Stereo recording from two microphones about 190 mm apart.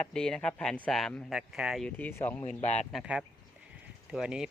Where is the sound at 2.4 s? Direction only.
35° left (ahead or behind).